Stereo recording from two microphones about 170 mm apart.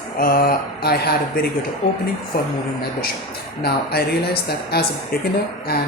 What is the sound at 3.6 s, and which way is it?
A woman's voice, 70° left (ahead or behind).